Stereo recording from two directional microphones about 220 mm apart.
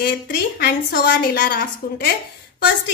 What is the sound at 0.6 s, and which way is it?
A woman's voice, 45° left (ahead or behind).